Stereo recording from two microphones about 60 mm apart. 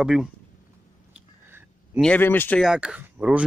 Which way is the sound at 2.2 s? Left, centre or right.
Left.